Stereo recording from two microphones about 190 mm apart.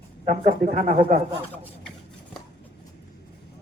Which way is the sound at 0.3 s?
45° right (ahead or behind).